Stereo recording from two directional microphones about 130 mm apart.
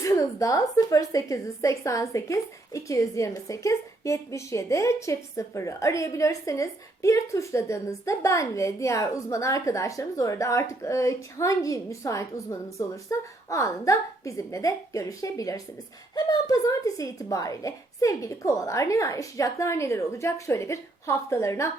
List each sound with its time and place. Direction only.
0.0 s a woman's voice: 25° left (ahead or behind)